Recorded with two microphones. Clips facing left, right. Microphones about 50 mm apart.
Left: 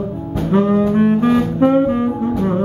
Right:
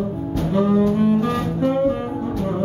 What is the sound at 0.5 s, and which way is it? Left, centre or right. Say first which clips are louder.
Music: left 4 dB; left.